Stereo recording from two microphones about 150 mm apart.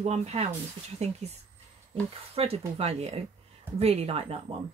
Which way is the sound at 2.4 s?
40° right (ahead or behind).